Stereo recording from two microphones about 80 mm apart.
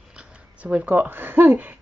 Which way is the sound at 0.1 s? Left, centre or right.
Centre.